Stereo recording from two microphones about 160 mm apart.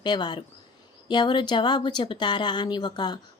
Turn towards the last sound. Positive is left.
turn(degrees=25)  # may be behind; listen again after turning